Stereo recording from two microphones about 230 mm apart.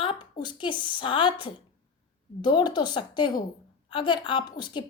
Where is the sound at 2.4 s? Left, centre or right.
Left.